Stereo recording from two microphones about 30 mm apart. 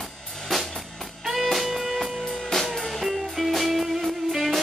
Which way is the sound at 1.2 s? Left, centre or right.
Centre.